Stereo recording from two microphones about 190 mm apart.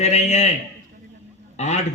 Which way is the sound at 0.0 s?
35° left (ahead or behind).